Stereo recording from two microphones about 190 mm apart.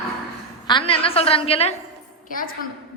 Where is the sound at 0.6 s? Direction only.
25° left (ahead or behind).